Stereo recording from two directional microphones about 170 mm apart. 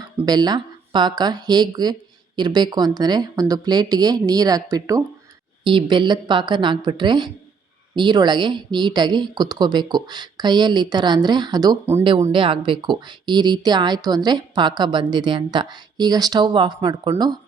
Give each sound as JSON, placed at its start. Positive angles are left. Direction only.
{"t": 0.2, "sound": "speech", "side_deg": -25}
{"t": 12.3, "sound": "speech", "side_deg": -30}